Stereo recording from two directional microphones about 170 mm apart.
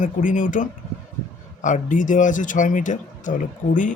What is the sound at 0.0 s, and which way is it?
Speech, 50° left (ahead or behind).